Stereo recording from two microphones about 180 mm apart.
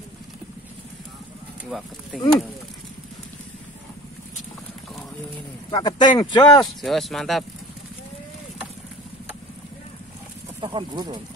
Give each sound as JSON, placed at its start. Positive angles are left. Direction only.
{"t": 2.1, "sound": "speech", "side_deg": 0}
{"t": 5.7, "sound": "speech", "side_deg": 25}
{"t": 6.5, "sound": "speech", "side_deg": 0}
{"t": 10.6, "sound": "speech", "side_deg": -25}